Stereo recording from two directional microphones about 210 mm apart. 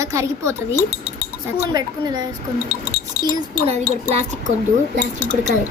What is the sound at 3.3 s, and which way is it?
Speech, 20° right (ahead or behind).